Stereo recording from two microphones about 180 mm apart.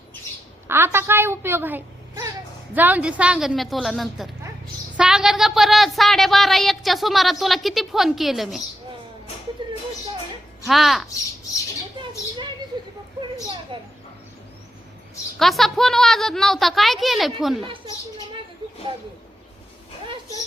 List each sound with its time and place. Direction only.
0.7 s a woman's voice: 15° right (ahead or behind)
9.6 s children playing: 25° right (ahead or behind)
10.7 s a woman's voice: centre (ahead or behind)
13.7 s a sound: 30° right (ahead or behind)
15.4 s a woman's voice: centre (ahead or behind)